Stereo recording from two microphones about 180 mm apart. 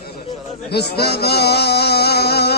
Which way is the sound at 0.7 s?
65° left (ahead or behind).